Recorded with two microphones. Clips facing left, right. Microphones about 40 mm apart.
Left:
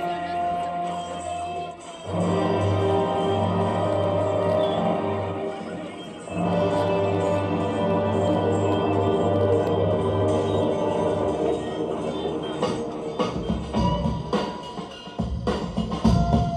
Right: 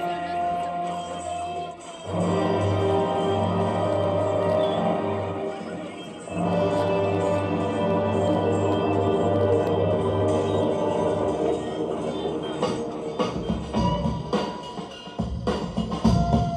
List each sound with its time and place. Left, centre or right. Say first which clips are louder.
0.1 s a sound: even; left
0.4 s music: even; centre
7.8 s music: even; centre
8.1 s music: even; left
8.4 s music: even; centre
10.1 s music: even; left
11.9 s music: even; centre
13.2 s music: even; left